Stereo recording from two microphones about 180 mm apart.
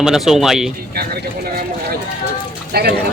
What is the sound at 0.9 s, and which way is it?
Speech, 60° right (ahead or behind).